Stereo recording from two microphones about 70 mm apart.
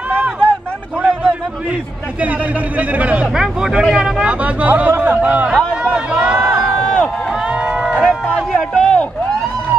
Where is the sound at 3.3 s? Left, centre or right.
Centre.